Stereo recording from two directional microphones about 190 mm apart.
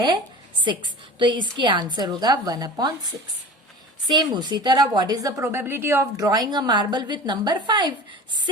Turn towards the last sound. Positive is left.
turn(degrees=-25)  # may be behind; listen again after turning